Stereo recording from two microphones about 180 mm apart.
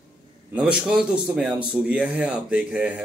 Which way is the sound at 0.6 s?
5° right (ahead or behind).